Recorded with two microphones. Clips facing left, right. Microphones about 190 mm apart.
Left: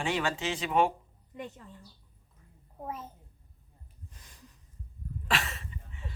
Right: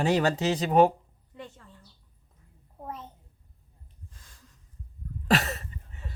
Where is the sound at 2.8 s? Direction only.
5° left (ahead or behind).